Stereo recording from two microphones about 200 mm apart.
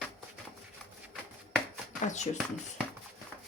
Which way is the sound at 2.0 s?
35° left (ahead or behind).